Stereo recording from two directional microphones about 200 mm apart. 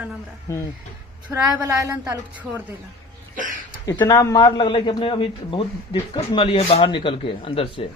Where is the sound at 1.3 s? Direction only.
Centre (ahead or behind).